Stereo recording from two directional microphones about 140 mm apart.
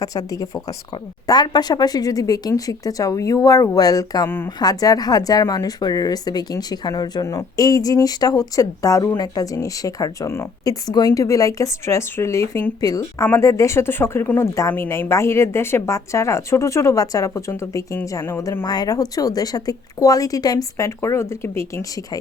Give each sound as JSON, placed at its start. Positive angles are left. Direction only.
{"t": 0.0, "sound": "speech", "side_deg": 25}